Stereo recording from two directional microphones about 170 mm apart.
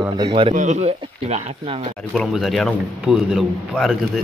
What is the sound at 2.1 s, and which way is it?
Speech, centre (ahead or behind).